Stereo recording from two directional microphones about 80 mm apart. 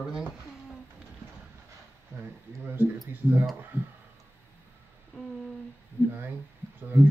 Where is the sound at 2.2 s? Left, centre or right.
Right.